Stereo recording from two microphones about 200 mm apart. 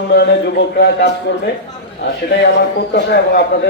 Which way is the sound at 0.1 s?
60° left (ahead or behind).